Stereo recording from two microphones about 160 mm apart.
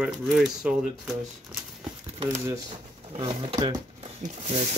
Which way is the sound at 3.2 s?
35° right (ahead or behind).